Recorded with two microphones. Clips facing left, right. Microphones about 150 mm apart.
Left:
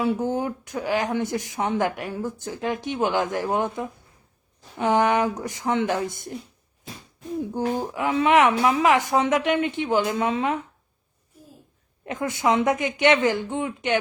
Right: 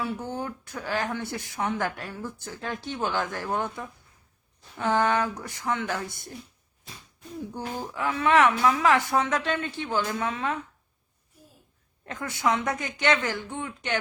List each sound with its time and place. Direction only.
0.0 s a woman's voice: 20° left (ahead or behind)
7.9 s a woman's voice: 20° left (ahead or behind)
12.0 s a woman's voice: 20° left (ahead or behind)